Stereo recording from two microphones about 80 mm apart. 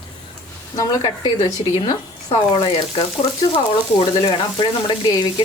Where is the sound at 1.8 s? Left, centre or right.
Left.